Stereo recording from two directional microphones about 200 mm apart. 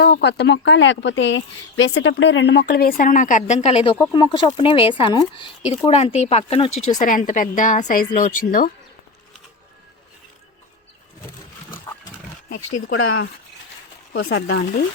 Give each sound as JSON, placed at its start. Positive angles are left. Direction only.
{"t": 0.0, "sound": "speech", "side_deg": 55}
{"t": 6.7, "sound": "a woman's voice", "side_deg": 40}
{"t": 14.1, "sound": "speech", "side_deg": 65}